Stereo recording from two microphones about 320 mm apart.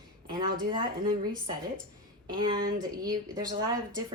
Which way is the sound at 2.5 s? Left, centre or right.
Right.